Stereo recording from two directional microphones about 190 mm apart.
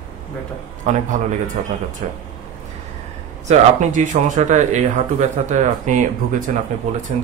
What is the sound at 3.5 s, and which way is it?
Speech, 40° right (ahead or behind).